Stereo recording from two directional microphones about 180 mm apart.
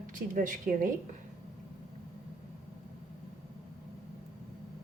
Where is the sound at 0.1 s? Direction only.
45° right (ahead or behind).